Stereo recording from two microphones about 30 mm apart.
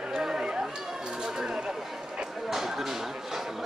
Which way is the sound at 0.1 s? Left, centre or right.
Centre.